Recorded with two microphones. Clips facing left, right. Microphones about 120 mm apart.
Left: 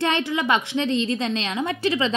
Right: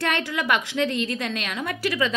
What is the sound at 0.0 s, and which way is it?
A woman's voice, 20° left (ahead or behind).